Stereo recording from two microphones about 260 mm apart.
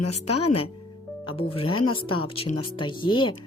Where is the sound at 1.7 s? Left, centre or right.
Left.